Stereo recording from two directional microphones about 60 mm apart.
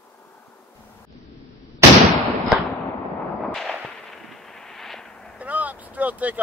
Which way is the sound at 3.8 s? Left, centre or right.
Centre.